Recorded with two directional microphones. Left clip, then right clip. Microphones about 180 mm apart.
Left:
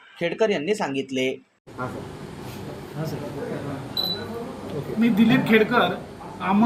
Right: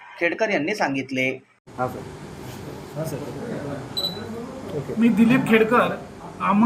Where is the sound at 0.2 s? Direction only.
40° left (ahead or behind).